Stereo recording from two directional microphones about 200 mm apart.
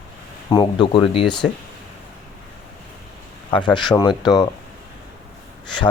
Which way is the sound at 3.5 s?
25° left (ahead or behind).